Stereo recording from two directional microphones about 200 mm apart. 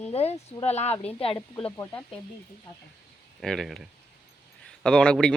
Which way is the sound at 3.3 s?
Centre (ahead or behind).